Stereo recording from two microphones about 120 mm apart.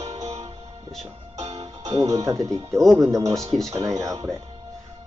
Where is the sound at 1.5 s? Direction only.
35° right (ahead or behind).